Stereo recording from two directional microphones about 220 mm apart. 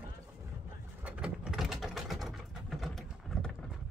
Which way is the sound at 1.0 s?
5° right (ahead or behind).